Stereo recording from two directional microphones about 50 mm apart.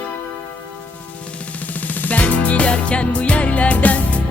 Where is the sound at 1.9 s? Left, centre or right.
Left.